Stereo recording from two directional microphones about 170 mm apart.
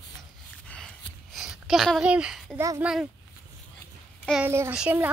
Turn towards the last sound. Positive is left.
turn(degrees=-10)  # may be behind; listen again after turning